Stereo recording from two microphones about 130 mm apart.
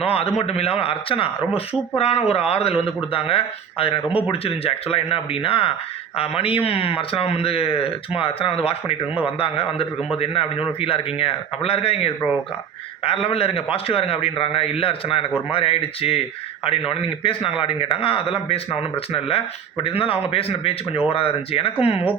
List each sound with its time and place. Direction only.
0.0 s a man's voice: 50° left (ahead or behind)